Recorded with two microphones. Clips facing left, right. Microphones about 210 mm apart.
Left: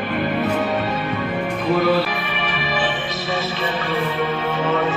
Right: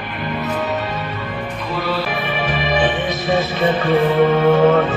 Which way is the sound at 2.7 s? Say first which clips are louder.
Right 6 dB; 20° right (ahead or behind).